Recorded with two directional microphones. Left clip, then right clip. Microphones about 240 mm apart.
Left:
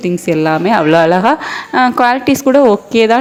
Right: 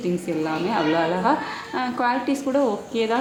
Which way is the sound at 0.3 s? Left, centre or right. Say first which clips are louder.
Left 16 dB; left.